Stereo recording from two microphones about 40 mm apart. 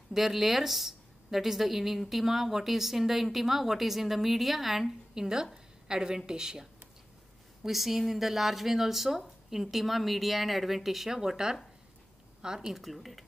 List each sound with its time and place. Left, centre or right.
0.1 s a woman's voice: centre
5.1 s a woman's voice: centre
7.6 s a woman's voice: centre
12.7 s a woman's voice: centre